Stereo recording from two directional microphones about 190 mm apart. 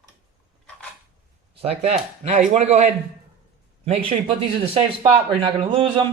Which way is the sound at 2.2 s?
35° right (ahead or behind).